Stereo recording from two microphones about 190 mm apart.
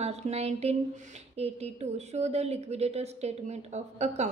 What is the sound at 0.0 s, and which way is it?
A woman's voice, 35° right (ahead or behind).